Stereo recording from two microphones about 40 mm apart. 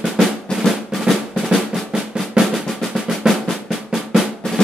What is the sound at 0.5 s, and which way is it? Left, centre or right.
Drum, centre.